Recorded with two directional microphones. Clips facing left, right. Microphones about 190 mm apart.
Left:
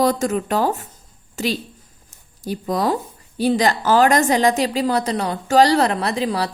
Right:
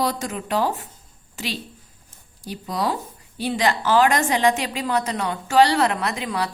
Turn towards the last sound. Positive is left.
turn(degrees=35)  # may be behind; listen again after turning